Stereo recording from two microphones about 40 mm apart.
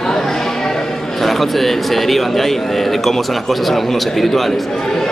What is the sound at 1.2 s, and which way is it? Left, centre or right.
A man's voice, centre.